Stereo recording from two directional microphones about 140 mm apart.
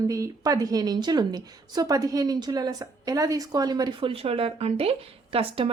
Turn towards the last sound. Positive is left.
turn(degrees=-40)  # may be behind; listen again after turning